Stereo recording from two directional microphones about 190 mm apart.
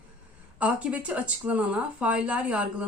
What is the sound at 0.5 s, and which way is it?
Speech, 5° right (ahead or behind).